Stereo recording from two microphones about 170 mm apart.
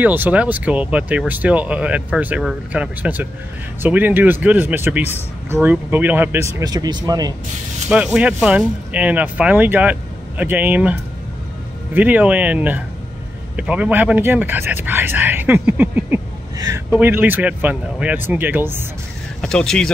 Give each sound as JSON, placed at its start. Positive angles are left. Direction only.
{"t": 0.0, "sound": "speech", "side_deg": -10}
{"t": 6.6, "sound": "speech", "side_deg": -20}
{"t": 7.9, "sound": "speech", "side_deg": -5}
{"t": 19.4, "sound": "speech", "side_deg": 5}